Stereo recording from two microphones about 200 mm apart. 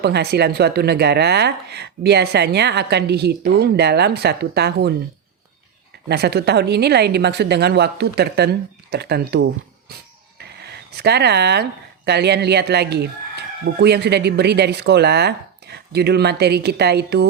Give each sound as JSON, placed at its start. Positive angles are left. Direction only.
{"t": 0.0, "sound": "a woman's voice", "side_deg": -55}
{"t": 6.1, "sound": "a woman's voice", "side_deg": -55}
{"t": 10.4, "sound": "speech", "side_deg": -55}